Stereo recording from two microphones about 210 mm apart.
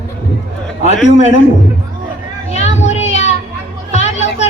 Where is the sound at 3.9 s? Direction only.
30° left (ahead or behind).